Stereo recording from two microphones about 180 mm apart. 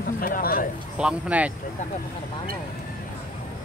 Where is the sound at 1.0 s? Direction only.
5° right (ahead or behind).